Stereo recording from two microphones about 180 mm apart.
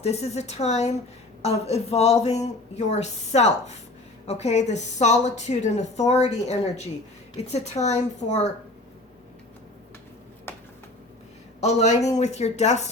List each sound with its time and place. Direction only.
0.0 s a woman's voice: 35° left (ahead or behind)
11.6 s a woman's voice: 40° left (ahead or behind)